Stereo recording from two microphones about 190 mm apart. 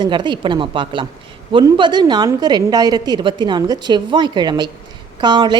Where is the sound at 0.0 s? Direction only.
25° right (ahead or behind).